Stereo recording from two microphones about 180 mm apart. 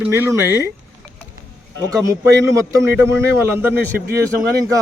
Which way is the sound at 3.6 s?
10° right (ahead or behind).